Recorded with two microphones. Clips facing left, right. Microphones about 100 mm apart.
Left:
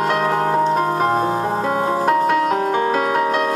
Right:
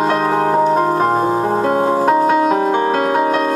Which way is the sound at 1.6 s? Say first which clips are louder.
Right 4 dB; 30° right (ahead or behind).